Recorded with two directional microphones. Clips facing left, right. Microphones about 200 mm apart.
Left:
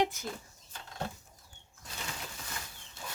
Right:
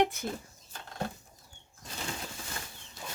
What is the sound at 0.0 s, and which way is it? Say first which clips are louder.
Music: right 3 dB; 60° right (ahead or behind).